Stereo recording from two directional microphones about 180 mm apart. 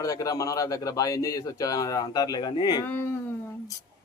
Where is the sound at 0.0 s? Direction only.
20° left (ahead or behind).